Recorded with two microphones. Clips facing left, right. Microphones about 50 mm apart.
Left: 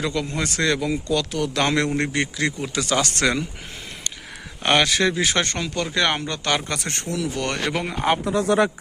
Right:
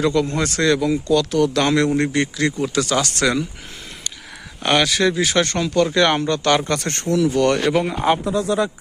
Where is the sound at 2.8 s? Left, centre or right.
Left.